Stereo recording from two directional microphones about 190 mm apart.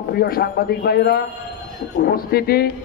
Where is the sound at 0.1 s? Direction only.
55° left (ahead or behind).